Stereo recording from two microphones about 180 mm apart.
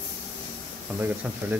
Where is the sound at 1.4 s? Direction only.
10° right (ahead or behind).